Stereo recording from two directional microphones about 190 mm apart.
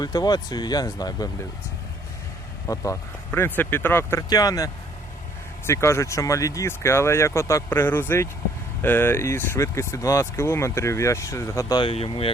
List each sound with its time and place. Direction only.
0.0 s speech: 20° left (ahead or behind)
2.7 s speech: 15° left (ahead or behind)